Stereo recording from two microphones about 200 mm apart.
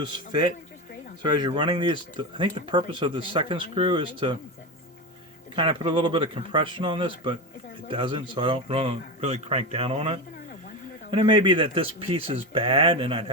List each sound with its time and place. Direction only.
1.2 s speech: 20° right (ahead or behind)
5.5 s speech: 25° right (ahead or behind)